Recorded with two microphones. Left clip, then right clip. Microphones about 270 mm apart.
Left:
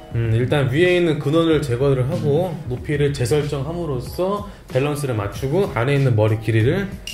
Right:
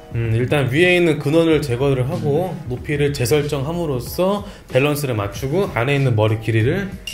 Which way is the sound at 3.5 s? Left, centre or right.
Right.